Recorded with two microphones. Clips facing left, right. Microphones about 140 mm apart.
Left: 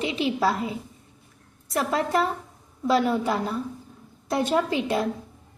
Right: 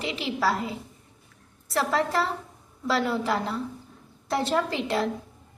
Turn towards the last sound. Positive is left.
turn(degrees=15)  # may be behind; listen again after turning